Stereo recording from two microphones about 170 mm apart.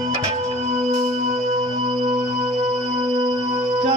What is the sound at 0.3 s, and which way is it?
Music, 40° right (ahead or behind).